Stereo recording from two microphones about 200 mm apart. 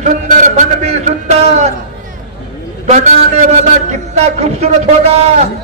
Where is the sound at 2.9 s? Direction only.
35° right (ahead or behind).